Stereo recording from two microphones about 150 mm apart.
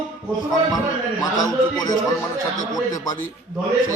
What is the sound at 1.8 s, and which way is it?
Speech, 25° left (ahead or behind).